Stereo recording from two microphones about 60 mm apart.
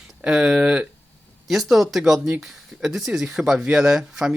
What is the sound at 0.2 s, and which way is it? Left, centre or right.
Speech, centre.